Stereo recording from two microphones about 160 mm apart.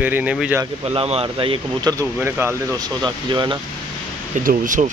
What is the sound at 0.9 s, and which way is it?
Speech, 40° right (ahead or behind).